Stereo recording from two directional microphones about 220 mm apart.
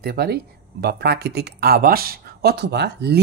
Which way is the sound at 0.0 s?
45° right (ahead or behind).